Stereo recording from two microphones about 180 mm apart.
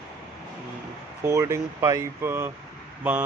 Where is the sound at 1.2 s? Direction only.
15° right (ahead or behind).